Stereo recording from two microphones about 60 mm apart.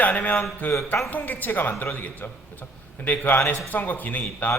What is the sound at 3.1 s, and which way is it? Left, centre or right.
A man's voice, left.